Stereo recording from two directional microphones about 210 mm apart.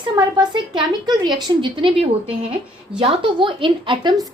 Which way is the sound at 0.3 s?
20° right (ahead or behind).